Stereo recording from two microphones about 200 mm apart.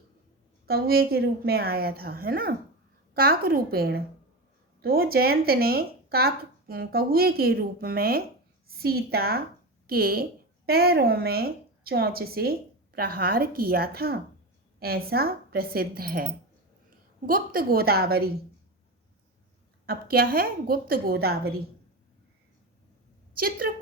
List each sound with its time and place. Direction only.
0.7 s a woman's voice: 50° right (ahead or behind)
17.2 s a woman's voice: 45° right (ahead or behind)
19.8 s a woman's voice: 50° right (ahead or behind)
23.3 s a woman's voice: 45° right (ahead or behind)